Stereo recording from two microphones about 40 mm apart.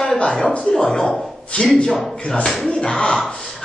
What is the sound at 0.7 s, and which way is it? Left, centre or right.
Speech, centre.